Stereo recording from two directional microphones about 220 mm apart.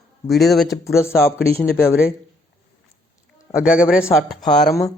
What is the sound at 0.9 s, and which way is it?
Speech, 10° left (ahead or behind).